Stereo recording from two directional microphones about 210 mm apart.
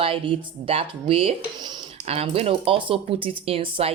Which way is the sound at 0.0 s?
25° right (ahead or behind).